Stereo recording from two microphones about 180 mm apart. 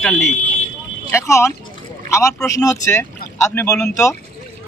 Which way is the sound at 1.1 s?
15° left (ahead or behind).